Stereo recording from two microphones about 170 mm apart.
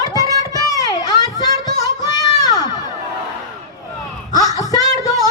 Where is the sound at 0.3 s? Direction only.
20° left (ahead or behind).